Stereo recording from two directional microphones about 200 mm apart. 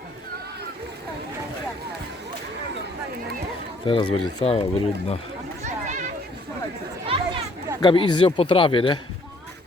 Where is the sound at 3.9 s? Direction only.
25° left (ahead or behind).